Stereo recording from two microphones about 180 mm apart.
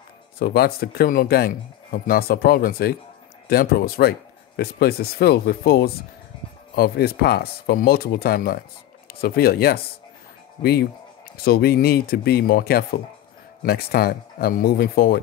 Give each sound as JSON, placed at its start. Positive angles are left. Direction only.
{"t": 0.4, "sound": "speech", "side_deg": 60}